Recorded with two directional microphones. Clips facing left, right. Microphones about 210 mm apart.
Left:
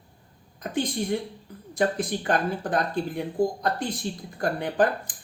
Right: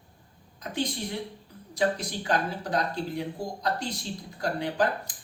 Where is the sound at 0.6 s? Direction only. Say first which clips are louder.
Left 4 dB; 50° left (ahead or behind).